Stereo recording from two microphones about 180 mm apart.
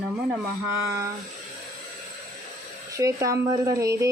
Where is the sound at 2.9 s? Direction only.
15° right (ahead or behind).